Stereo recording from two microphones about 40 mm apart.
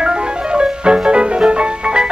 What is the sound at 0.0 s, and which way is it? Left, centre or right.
Music, right.